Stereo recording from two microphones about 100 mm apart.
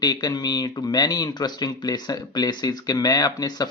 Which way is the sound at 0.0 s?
40° left (ahead or behind).